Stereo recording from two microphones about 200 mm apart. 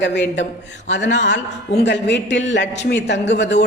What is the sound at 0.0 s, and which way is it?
A woman's voice, 60° left (ahead or behind).